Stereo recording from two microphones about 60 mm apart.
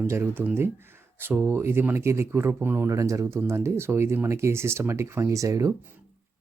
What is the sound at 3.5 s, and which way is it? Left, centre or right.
Speech, right.